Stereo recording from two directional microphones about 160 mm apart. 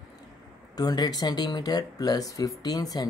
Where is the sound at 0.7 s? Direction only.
25° left (ahead or behind).